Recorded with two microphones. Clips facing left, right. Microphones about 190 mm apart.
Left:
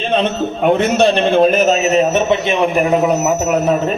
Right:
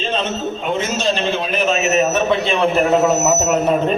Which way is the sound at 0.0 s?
60° left (ahead or behind).